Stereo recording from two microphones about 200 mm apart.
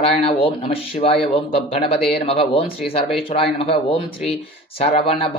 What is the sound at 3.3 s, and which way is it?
Speech, 30° left (ahead or behind).